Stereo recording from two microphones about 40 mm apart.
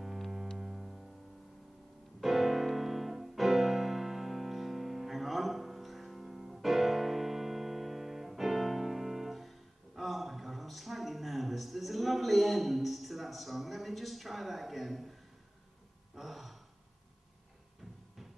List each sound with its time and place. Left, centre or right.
0.6 s music: centre
2.1 s music: centre
16.2 s a sound: centre